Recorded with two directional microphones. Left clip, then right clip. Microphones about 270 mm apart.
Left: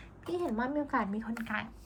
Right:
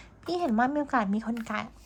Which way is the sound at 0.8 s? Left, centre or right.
Right.